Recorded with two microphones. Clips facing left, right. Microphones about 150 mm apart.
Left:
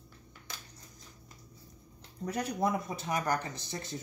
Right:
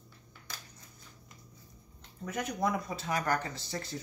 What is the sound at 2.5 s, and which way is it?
Speech, 20° left (ahead or behind).